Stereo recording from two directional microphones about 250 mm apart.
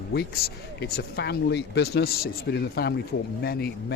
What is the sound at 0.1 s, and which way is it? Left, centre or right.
Speech, left.